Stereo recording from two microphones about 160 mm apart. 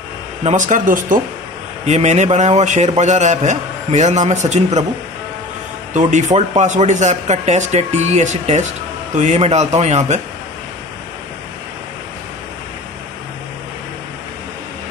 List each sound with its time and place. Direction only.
0.4 s speech: 45° right (ahead or behind)
1.9 s speech: 45° right (ahead or behind)
5.9 s speech: 50° right (ahead or behind)